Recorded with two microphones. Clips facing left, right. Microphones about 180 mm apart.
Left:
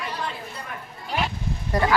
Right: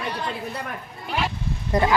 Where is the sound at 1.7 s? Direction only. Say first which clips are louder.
Right 2 dB; 20° right (ahead or behind).